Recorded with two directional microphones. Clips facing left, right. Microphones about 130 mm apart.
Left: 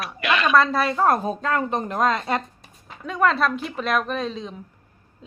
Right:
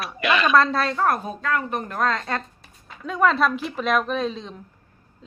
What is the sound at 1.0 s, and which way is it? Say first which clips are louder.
Speech: left 3 dB; 25° left (ahead or behind).